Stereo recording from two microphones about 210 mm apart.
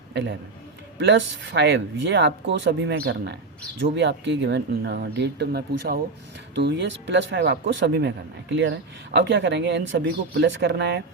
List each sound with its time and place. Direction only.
0.1 s a man's voice: 55° right (ahead or behind)